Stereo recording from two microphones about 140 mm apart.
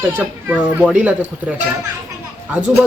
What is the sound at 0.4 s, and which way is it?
Speech, 10° right (ahead or behind).